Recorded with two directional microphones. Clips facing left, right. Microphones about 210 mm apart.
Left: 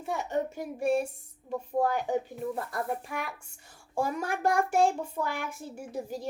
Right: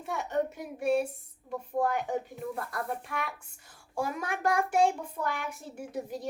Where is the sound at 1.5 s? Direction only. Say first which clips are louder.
Left 2 dB; 30° left (ahead or behind).